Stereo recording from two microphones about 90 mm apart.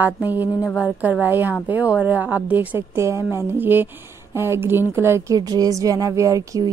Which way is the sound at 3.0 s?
30° right (ahead or behind).